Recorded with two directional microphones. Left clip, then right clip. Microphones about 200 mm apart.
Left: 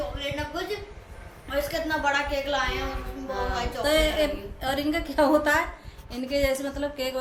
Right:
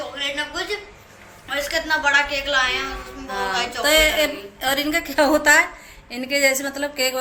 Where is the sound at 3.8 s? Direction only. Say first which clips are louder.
Right 6 dB; 20° right (ahead or behind).